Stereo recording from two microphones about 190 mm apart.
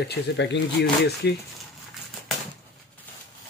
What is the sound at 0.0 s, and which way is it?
Speech, 65° left (ahead or behind).